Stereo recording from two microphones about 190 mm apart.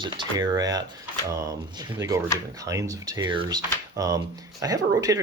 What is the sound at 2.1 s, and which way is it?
Speech, 15° right (ahead or behind).